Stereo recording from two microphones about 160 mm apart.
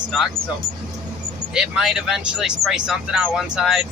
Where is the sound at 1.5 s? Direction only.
5° right (ahead or behind).